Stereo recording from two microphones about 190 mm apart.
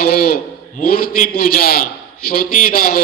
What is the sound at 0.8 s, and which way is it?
A man's voice, 50° left (ahead or behind).